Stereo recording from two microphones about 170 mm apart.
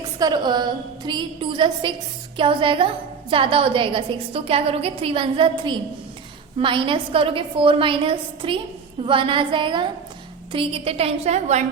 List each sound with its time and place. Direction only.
0.2 s a woman's voice: 25° right (ahead or behind); by 11.6 s 40° right (ahead or behind)